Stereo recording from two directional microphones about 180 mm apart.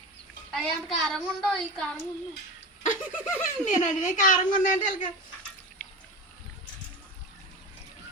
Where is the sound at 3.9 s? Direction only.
45° left (ahead or behind).